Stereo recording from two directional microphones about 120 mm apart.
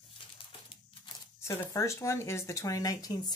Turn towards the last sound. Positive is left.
turn(degrees=30)  # may be behind; listen again after turning